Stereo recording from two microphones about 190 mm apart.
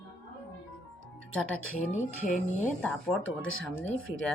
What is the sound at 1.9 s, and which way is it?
Speech, 40° left (ahead or behind).